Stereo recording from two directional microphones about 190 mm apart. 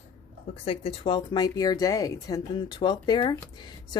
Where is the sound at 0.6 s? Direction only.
30° left (ahead or behind).